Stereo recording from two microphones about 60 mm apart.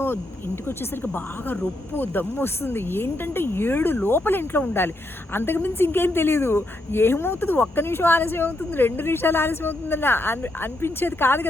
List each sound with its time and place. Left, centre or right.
1.0 s a woman's voice: left